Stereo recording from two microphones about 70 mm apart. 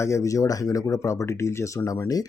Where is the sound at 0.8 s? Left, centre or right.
Left.